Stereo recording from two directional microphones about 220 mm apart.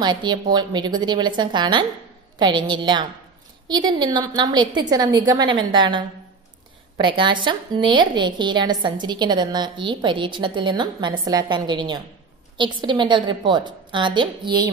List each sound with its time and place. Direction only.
0.0 s a woman's voice: 20° right (ahead or behind)